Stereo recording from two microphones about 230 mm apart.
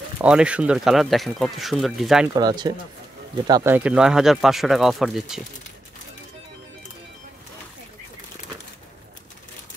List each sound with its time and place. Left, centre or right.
0.2 s speech: centre
2.3 s speech: centre